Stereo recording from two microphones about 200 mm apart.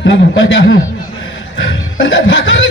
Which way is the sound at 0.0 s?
65° left (ahead or behind).